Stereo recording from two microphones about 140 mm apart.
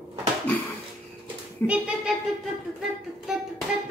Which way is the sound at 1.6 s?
10° left (ahead or behind).